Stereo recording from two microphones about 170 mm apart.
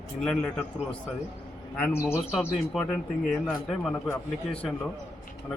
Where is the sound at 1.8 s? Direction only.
15° left (ahead or behind).